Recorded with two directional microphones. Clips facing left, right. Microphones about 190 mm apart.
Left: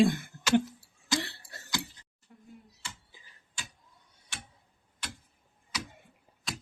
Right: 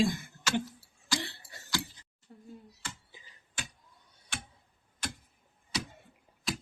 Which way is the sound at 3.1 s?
20° right (ahead or behind).